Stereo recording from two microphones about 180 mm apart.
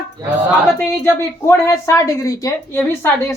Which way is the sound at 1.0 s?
15° left (ahead or behind).